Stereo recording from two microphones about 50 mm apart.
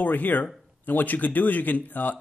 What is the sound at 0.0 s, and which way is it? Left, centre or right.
Speech, left.